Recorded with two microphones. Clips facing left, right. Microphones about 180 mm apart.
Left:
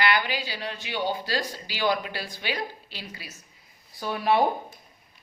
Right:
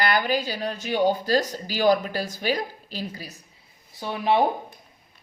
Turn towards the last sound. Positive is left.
turn(degrees=-20)  # may be behind; listen again after turning